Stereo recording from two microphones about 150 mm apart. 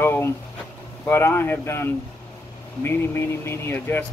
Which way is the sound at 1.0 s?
15° left (ahead or behind).